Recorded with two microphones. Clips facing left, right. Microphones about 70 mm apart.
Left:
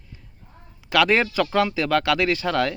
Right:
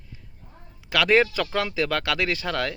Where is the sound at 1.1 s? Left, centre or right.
Left.